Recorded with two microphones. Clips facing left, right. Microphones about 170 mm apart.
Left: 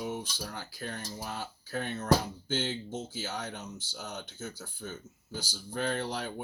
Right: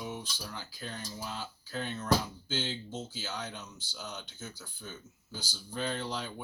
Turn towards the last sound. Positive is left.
turn(degrees=60)  # may be behind; listen again after turning